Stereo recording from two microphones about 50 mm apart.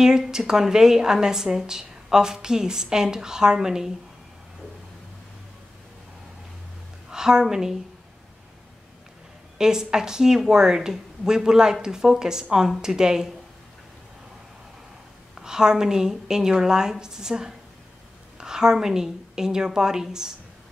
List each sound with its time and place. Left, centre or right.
0.0 s a woman's voice: centre
7.1 s a woman's voice: centre
9.6 s a woman's voice: centre
15.4 s a woman's voice: centre